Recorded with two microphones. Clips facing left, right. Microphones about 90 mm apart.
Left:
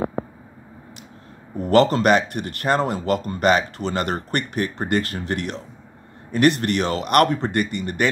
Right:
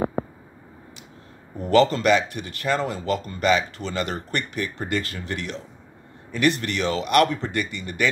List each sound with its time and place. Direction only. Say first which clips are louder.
1.7 s speech: left 2 dB; 55° left (ahead or behind)